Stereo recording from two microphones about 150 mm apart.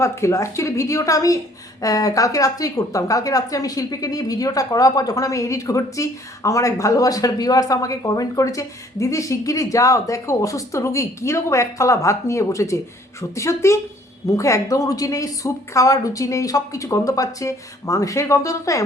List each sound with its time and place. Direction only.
0.0 s a woman's voice: 20° left (ahead or behind)